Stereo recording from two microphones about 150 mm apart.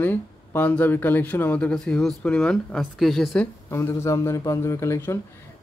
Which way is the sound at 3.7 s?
15° left (ahead or behind).